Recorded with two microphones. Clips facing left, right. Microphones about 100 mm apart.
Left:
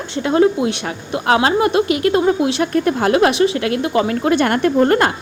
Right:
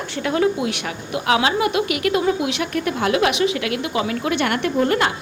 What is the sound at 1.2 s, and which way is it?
Speech, 40° left (ahead or behind).